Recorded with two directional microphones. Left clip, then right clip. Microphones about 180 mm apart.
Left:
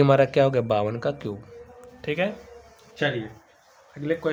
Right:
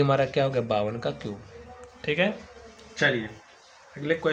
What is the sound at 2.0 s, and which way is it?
Speech, 25° left (ahead or behind).